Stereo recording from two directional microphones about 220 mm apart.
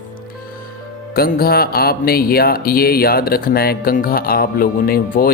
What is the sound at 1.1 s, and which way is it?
Speech, 45° left (ahead or behind).